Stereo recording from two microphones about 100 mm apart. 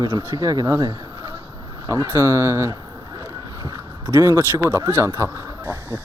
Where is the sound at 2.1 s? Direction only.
25° right (ahead or behind).